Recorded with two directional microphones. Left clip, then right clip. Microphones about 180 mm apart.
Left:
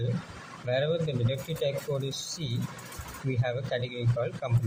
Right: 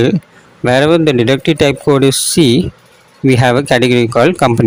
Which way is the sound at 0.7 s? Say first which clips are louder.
Right 19 dB; 75° right (ahead or behind).